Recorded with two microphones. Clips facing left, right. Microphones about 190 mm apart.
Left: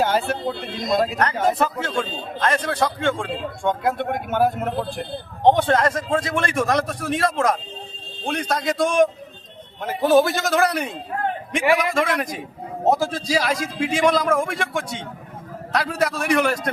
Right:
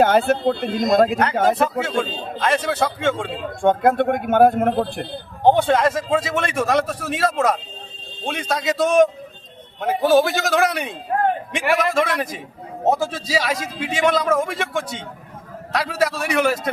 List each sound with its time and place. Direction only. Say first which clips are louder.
0.0 s speech: right 5 dB; 55° right (ahead or behind)
1.1 s a man's voice: right 3 dB; 5° right (ahead or behind)
3.6 s speech: right 7 dB; 55° right (ahead or behind)
5.4 s a man's voice: right 1 dB; 5° right (ahead or behind)